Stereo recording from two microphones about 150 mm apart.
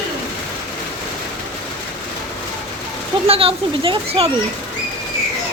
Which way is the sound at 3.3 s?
40° right (ahead or behind).